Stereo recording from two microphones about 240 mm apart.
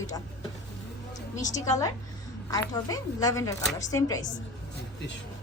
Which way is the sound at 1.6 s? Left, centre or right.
Centre.